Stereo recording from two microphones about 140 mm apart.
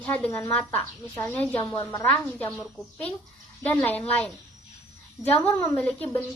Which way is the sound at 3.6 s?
10° left (ahead or behind).